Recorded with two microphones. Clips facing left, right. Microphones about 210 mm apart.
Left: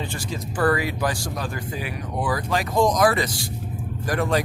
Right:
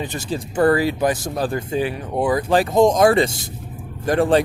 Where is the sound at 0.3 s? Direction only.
25° right (ahead or behind).